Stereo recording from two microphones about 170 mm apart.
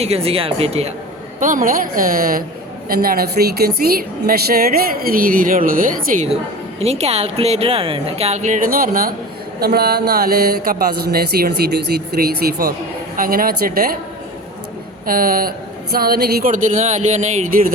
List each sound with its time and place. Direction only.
0.0 s speech: 35° right (ahead or behind)
1.4 s a woman's voice: 50° right (ahead or behind)
6.8 s a woman's voice: 40° right (ahead or behind); by 13.9 s 55° right (ahead or behind)
15.0 s a woman's voice: 55° right (ahead or behind)